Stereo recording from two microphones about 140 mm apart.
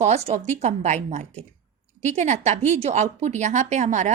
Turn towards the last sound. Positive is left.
turn(degrees=-55)  # may be behind; listen again after turning